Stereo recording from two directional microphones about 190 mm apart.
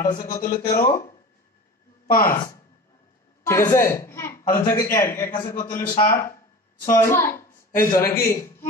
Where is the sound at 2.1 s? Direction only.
45° left (ahead or behind).